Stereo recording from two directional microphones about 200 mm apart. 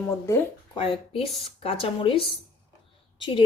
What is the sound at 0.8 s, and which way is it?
Speech, 25° left (ahead or behind).